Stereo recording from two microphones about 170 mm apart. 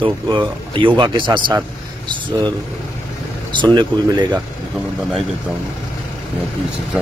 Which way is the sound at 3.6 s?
25° right (ahead or behind).